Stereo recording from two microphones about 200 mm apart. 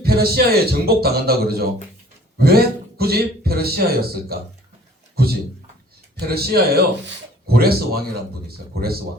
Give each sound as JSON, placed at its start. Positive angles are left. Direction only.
{"t": 0.0, "sound": "speech", "side_deg": -50}